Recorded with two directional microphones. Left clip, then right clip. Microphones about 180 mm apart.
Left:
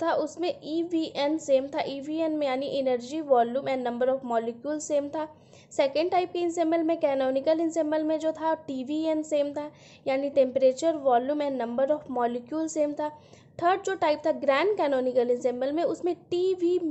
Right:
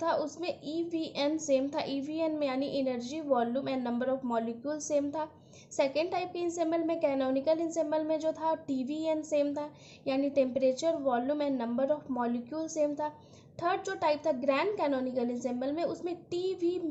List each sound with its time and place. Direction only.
0.0 s a woman's voice: 30° left (ahead or behind)